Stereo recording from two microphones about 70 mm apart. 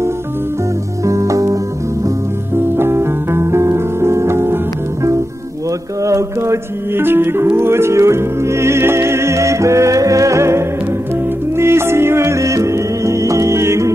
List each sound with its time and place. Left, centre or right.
1.0 s music: right
2.5 s music: right
6.0 s music: right